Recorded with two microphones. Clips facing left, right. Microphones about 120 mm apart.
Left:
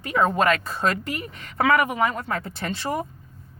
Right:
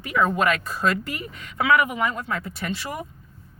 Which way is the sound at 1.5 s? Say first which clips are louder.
Even; 45° left (ahead or behind).